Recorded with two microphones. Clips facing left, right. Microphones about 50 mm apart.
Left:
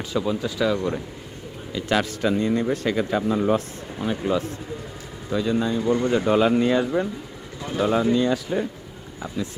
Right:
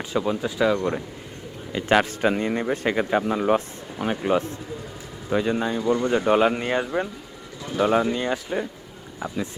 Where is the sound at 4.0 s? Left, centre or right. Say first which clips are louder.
Right 1 dB; right.